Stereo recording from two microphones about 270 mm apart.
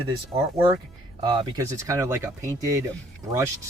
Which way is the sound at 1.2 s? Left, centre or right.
Centre.